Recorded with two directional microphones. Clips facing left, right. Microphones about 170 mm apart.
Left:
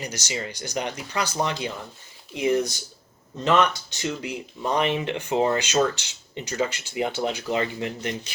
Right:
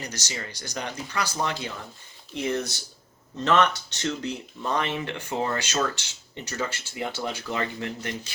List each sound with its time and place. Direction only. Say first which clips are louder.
0.0 s speech: left 4 dB; 20° left (ahead or behind)